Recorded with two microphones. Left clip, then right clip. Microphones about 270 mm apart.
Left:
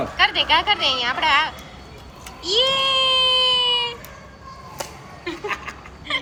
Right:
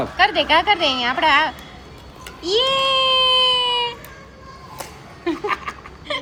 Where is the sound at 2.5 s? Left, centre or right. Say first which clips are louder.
Right 1 dB; right.